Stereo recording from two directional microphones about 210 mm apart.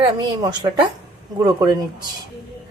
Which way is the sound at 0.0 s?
20° right (ahead or behind).